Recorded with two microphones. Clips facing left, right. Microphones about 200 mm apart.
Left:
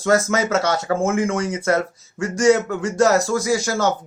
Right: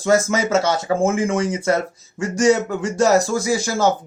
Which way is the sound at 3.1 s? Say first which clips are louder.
Right 2 dB; 30° right (ahead or behind).